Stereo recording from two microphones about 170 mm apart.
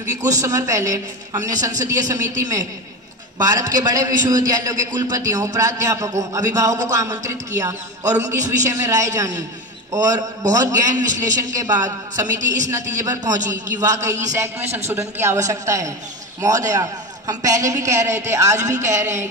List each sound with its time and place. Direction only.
0.2 s a man's voice: 20° right (ahead or behind)